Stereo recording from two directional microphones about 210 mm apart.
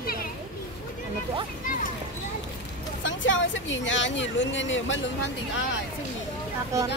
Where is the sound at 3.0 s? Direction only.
60° left (ahead or behind).